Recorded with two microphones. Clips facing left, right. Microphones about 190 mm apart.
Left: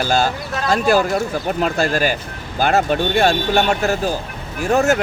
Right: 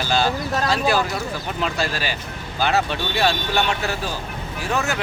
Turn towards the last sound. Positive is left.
turn(degrees=45)  # may be behind; listen again after turning